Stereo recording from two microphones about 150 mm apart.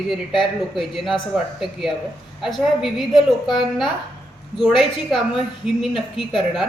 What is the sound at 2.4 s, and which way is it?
A woman's voice, centre (ahead or behind).